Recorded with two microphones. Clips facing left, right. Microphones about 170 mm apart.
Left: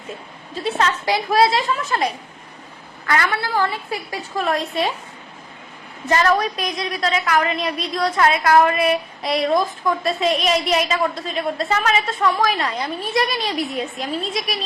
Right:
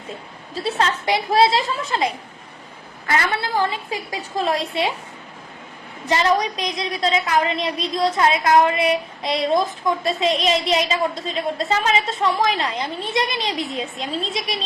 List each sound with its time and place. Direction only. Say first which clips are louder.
0.8 s a woman's voice: even; 25° right (ahead or behind)
4.4 s a woman's voice: even; 30° right (ahead or behind)
6.1 s a woman's voice: left 1 dB; 15° right (ahead or behind)